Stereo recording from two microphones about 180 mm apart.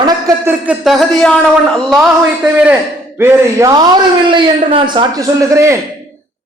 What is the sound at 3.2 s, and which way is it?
A man's voice, 20° right (ahead or behind).